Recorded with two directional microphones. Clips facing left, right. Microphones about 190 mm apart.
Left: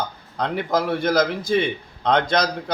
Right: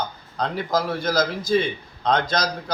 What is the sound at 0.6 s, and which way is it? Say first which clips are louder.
A man's voice: left 3 dB; 55° left (ahead or behind).